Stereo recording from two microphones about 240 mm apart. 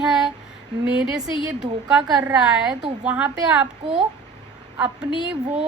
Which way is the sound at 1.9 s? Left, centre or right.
Centre.